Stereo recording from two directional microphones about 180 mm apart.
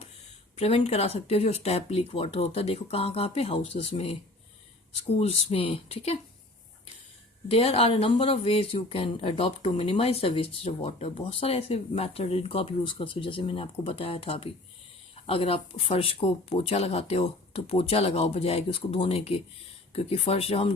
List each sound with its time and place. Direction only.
0.5 s speech: 35° left (ahead or behind)
7.4 s speech: 35° left (ahead or behind)